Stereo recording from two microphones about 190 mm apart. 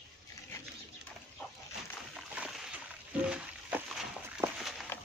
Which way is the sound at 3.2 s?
5° right (ahead or behind).